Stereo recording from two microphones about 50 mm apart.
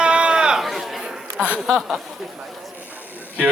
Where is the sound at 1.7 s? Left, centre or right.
Centre.